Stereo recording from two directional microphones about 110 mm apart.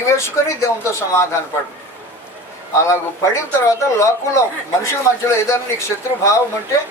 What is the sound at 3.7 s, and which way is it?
Speech, 30° left (ahead or behind).